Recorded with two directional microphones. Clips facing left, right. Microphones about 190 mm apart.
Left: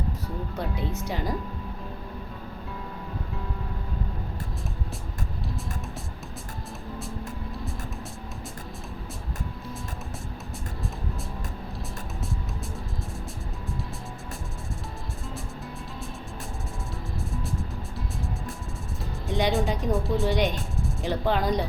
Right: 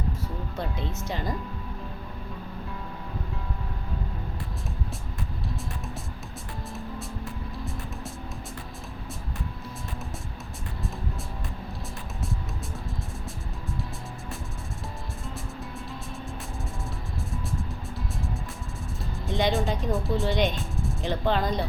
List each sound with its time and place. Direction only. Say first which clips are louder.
0.5 s speech: left 2 dB; 10° left (ahead or behind)
19.3 s music: even; 15° left (ahead or behind)
19.6 s speech: left 1 dB; 15° left (ahead or behind)